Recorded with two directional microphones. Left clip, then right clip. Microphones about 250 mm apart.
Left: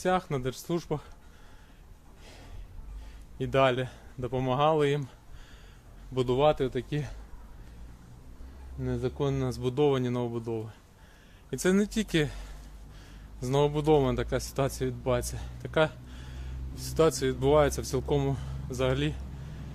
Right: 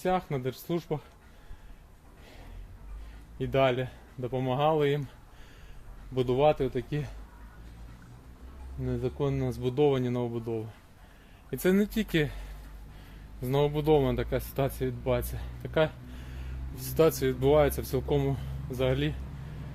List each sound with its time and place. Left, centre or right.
0.0 s speech: centre
3.3 s speech: centre
6.1 s speech: centre
8.8 s speech: centre